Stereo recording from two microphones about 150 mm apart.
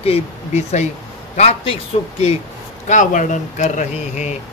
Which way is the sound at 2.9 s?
55° left (ahead or behind).